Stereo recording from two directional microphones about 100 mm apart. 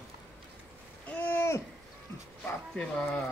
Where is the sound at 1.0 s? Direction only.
20° left (ahead or behind).